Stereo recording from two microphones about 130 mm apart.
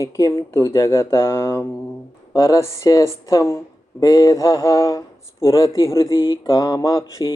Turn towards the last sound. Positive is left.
turn(degrees=25)  # may be behind; listen again after turning